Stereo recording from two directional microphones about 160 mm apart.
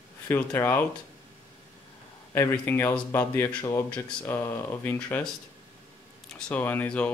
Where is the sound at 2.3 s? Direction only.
15° left (ahead or behind).